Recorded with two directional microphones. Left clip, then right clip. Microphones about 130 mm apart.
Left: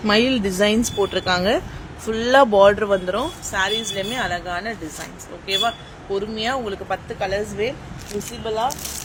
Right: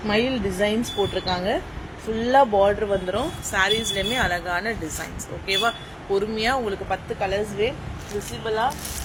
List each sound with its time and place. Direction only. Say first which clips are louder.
0.1 s speech: left 5 dB; 85° left
2.1 s speech: left 4 dB; 85° left
2.9 s speech: left 3 dB; 40° left (ahead or behind)
3.5 s a man's voice: right 1 dB; 10° left (ahead or behind)
6.8 s speech: left 1 dB; 30° left (ahead or behind)
8.4 s speech: left 1 dB; 50° left (ahead or behind)